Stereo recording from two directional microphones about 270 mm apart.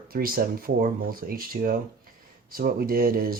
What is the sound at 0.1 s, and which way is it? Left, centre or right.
Speech, right.